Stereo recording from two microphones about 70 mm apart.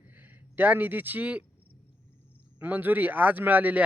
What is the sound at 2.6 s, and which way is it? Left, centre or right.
A man's voice, right.